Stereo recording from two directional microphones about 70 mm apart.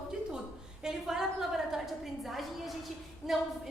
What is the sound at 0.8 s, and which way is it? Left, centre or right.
A woman's voice, centre.